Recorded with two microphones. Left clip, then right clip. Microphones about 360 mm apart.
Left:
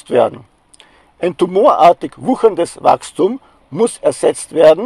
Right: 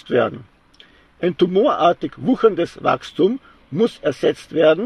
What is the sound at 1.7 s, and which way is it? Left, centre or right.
Speech, left.